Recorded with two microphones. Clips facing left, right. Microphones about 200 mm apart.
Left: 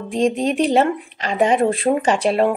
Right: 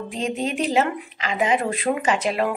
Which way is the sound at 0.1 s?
35° left (ahead or behind).